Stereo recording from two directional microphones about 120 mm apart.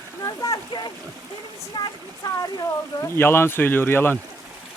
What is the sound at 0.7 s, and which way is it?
Stream, 40° left (ahead or behind).